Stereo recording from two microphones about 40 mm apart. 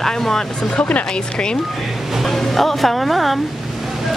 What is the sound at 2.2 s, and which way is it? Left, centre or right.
Speech, centre.